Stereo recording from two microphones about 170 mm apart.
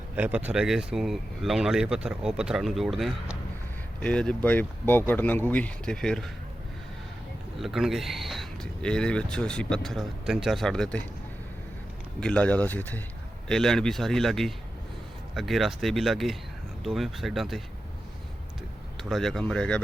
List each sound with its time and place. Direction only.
0.2 s speech: 10° right (ahead or behind)
7.6 s speech: centre (ahead or behind)
12.2 s speech: 5° left (ahead or behind)
18.9 s speech: centre (ahead or behind)